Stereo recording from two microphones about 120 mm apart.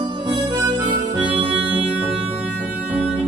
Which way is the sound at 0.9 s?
45° right (ahead or behind).